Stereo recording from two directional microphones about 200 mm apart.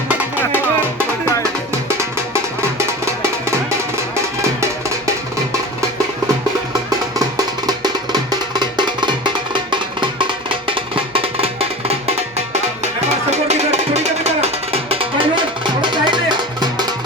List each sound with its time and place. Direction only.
0.1 s music: 10° right (ahead or behind)
7.2 s music: 20° right (ahead or behind)
13.3 s music: 35° right (ahead or behind)